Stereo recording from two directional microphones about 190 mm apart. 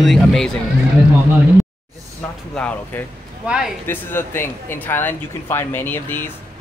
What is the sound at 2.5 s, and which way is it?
Speech, 5° left (ahead or behind).